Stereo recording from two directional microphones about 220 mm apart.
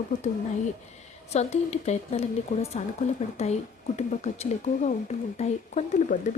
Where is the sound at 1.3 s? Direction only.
30° left (ahead or behind).